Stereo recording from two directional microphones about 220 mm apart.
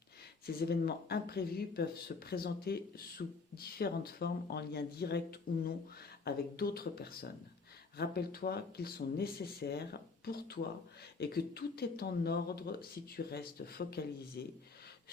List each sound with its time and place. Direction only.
0.4 s speech: 45° left (ahead or behind)